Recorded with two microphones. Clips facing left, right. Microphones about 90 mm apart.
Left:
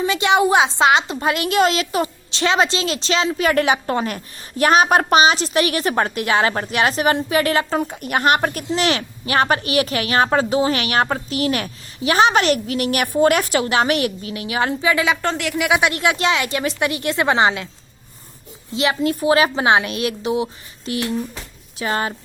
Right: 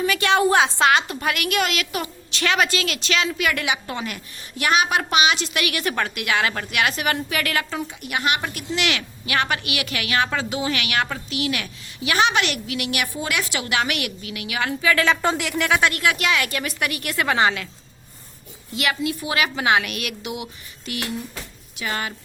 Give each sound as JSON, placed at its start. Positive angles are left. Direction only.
{"t": 0.0, "sound": "a woman's voice", "side_deg": 20}
{"t": 7.8, "sound": "speech", "side_deg": 45}
{"t": 8.7, "sound": "a woman's voice", "side_deg": 35}
{"t": 15.2, "sound": "a woman's voice", "side_deg": -5}
{"t": 18.7, "sound": "a woman's voice", "side_deg": 25}
{"t": 19.0, "sound": "a woman's voice", "side_deg": 40}